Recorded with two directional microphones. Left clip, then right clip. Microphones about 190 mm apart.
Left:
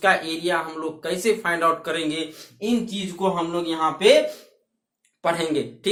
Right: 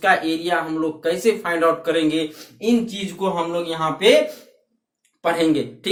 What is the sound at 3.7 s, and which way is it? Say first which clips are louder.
Speech: even; 25° left (ahead or behind).